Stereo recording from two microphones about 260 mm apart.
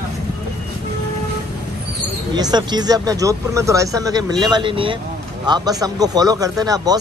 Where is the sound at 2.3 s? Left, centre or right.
Centre.